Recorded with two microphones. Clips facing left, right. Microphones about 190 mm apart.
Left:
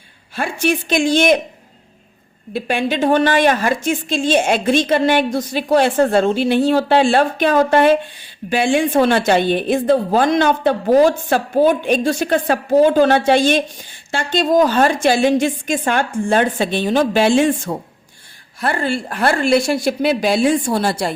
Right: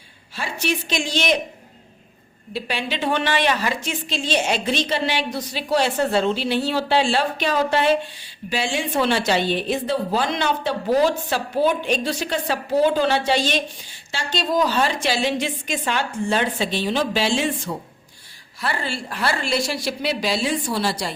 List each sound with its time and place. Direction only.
0.3 s a woman's voice: 50° left (ahead or behind)
2.5 s a woman's voice: 50° left (ahead or behind)